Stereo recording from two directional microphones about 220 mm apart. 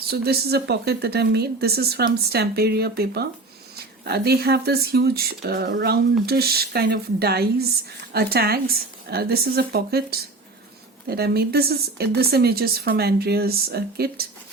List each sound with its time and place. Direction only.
0.1 s speech: 45° right (ahead or behind)